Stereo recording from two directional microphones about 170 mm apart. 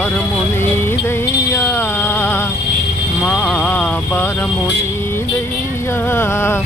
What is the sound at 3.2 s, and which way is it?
Speech, 10° left (ahead or behind).